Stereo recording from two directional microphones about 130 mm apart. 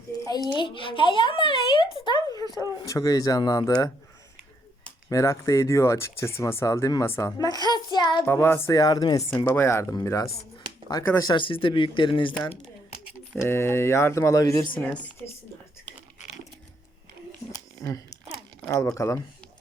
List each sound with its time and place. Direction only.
0.5 s speech: 40° left (ahead or behind)
5.0 s speech: 25° left (ahead or behind)
8.2 s speech: 15° left (ahead or behind); by 9.4 s 35° left (ahead or behind)
9.4 s speech: 20° left (ahead or behind)
11.3 s speech: 40° left (ahead or behind)
13.4 s speech: 20° left (ahead or behind)
14.8 s speech: 5° left (ahead or behind)
17.7 s a sound: 25° left (ahead or behind)
18.9 s speech: 25° left (ahead or behind)